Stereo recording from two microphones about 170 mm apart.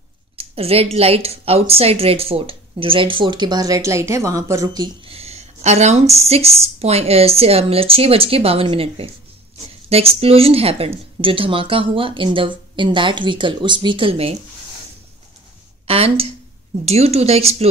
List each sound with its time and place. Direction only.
0.4 s a sound: 35° right (ahead or behind)
0.9 s speech: 35° right (ahead or behind); by 4.8 s 20° right (ahead or behind)
5.0 s speech: 35° right (ahead or behind)
15.9 s speech: 35° right (ahead or behind)